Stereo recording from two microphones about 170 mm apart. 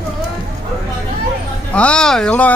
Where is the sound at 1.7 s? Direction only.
5° left (ahead or behind).